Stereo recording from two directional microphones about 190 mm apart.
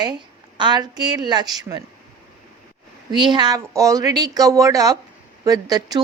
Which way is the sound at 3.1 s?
25° right (ahead or behind).